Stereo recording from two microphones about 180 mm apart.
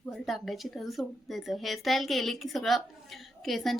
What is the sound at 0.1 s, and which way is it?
A woman's voice, centre (ahead or behind).